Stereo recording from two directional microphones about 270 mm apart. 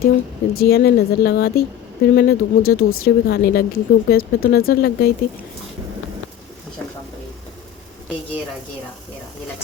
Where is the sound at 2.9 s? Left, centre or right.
Left.